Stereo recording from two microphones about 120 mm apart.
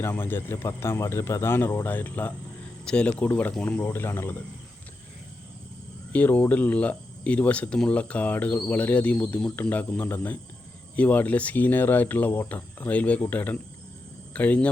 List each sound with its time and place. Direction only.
0.0 s speech: 20° left (ahead or behind)
6.1 s speech: 15° left (ahead or behind)